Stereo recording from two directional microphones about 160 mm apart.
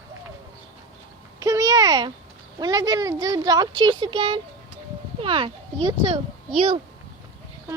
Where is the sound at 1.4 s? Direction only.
20° right (ahead or behind); by 6.8 s 35° right (ahead or behind).